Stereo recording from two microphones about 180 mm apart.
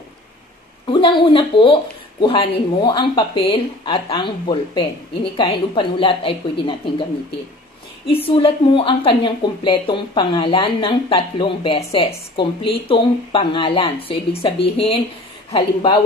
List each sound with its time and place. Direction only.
0.8 s speech: 30° left (ahead or behind)
8.1 s speech: 30° left (ahead or behind)